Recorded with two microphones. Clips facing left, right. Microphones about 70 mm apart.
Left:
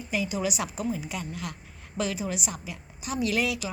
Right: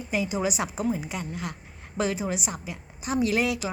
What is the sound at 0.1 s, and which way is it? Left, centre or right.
A woman's voice, right.